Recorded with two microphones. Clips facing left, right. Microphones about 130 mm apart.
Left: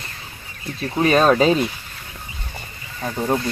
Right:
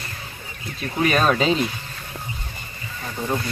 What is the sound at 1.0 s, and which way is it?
Speech, 30° left (ahead or behind).